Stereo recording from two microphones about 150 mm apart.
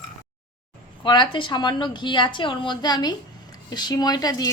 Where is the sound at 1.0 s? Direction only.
30° left (ahead or behind).